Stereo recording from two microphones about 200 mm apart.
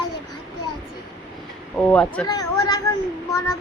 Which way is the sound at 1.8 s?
5° left (ahead or behind).